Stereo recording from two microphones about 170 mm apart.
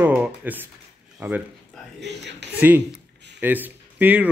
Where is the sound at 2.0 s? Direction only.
90° right.